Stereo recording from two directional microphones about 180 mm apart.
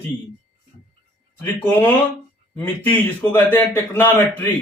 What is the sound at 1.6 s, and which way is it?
Speech, 10° left (ahead or behind).